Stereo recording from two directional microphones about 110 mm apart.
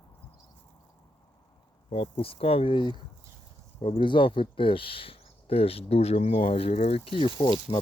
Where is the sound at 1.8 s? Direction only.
60° left (ahead or behind).